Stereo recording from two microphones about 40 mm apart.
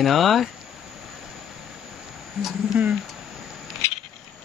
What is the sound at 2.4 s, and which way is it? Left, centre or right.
Speech, centre.